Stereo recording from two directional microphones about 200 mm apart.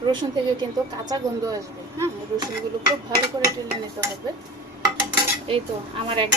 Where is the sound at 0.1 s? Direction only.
20° right (ahead or behind).